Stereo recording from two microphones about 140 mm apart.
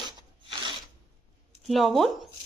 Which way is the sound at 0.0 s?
35° right (ahead or behind).